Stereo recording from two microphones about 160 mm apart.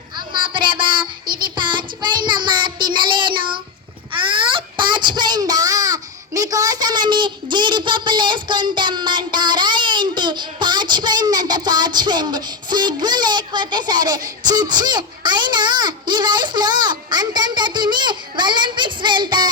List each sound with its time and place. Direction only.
0.2 s child singing: 30° right (ahead or behind)
4.8 s child singing: 30° right (ahead or behind)